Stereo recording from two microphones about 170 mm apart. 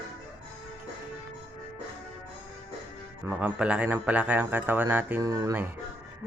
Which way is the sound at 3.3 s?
5° right (ahead or behind).